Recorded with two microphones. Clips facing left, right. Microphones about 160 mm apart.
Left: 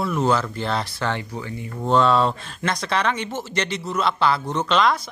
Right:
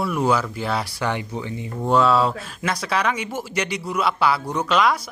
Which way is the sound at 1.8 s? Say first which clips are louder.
Even; 10° right (ahead or behind).